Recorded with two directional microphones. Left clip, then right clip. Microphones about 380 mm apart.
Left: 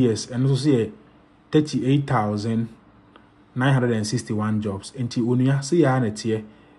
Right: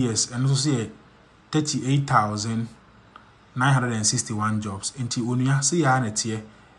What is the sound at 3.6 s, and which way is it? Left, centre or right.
Speech, centre.